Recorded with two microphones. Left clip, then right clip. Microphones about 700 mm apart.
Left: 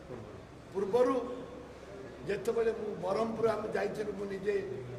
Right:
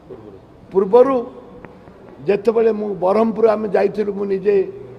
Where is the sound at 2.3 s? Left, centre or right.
Right.